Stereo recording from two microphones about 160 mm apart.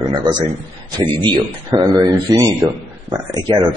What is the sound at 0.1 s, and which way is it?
A man's voice, 30° right (ahead or behind).